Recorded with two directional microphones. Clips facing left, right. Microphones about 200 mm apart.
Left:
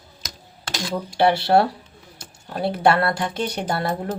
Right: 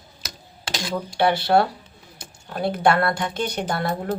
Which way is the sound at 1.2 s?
30° left (ahead or behind).